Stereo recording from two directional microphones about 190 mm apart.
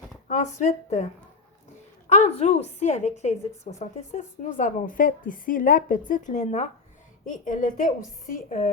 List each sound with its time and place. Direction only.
0.3 s a woman's voice: 40° left (ahead or behind)
2.0 s a woman's voice: 35° left (ahead or behind)